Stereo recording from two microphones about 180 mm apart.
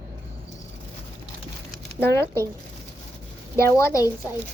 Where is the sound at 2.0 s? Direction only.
15° left (ahead or behind).